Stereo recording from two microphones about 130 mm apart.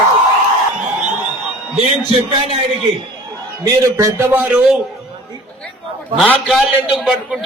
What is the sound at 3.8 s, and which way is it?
Speech, 20° right (ahead or behind).